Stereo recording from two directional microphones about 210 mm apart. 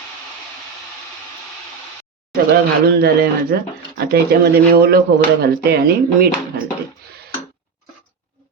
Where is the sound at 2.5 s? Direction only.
50° right (ahead or behind).